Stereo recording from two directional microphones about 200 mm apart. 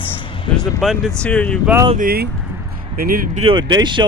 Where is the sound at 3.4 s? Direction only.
25° right (ahead or behind).